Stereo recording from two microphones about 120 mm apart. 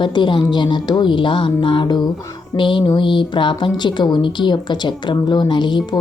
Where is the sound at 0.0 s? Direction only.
40° left (ahead or behind).